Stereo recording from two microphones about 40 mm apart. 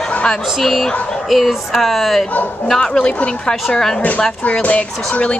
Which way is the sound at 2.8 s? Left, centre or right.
Centre.